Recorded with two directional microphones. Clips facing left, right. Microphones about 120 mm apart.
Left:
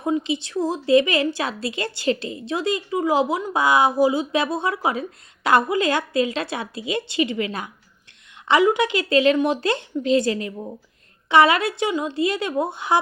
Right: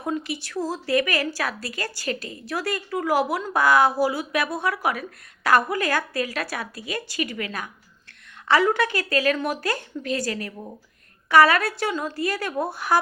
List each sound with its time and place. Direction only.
0.0 s a woman's voice: 20° left (ahead or behind)